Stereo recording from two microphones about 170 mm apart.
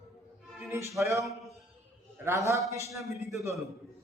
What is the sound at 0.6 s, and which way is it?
A man's voice, 15° right (ahead or behind).